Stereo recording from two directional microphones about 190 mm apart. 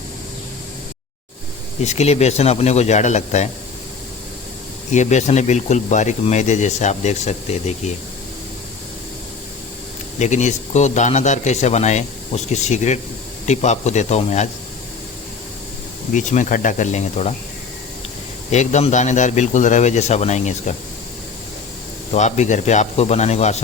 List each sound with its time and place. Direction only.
1.8 s speech: 35° left (ahead or behind)
4.9 s speech: 40° left (ahead or behind)
10.2 s speech: 40° left (ahead or behind)
16.1 s speech: 40° left (ahead or behind)
18.5 s speech: 35° left (ahead or behind)
22.1 s speech: 40° left (ahead or behind)